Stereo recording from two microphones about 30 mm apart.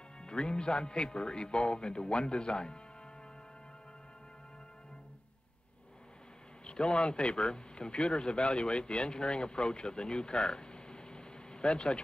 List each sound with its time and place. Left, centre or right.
0.2 s a man's voice: left
6.6 s speech: left